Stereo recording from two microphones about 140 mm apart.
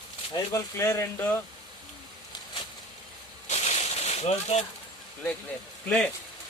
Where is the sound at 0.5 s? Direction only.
20° left (ahead or behind).